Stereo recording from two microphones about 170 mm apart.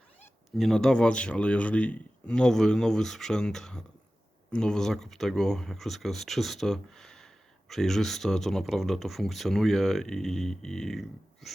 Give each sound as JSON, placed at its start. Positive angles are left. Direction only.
{"t": 0.2, "sound": "speech", "side_deg": 5}